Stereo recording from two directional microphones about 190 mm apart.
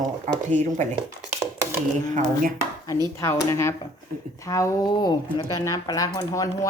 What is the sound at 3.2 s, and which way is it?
Speech, 15° left (ahead or behind).